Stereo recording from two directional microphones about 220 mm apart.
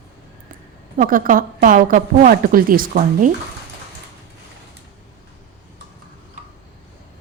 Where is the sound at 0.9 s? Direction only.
40° right (ahead or behind).